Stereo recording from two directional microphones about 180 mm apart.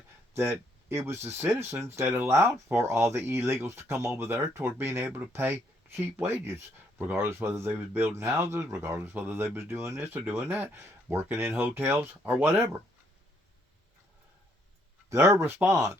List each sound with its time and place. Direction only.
0.9 s speech: 15° right (ahead or behind)
15.1 s speech: 15° right (ahead or behind)